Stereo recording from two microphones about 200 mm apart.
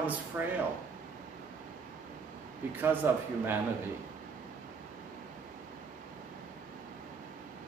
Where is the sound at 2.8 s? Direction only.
10° right (ahead or behind).